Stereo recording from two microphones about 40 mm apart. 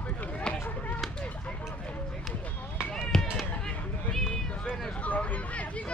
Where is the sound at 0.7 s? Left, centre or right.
Left.